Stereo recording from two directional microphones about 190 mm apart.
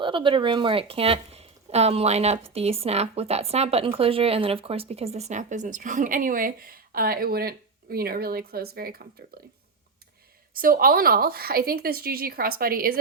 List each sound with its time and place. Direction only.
0.0 s speech: 25° right (ahead or behind); by 9.0 s 55° right (ahead or behind)
10.6 s speech: 50° right (ahead or behind)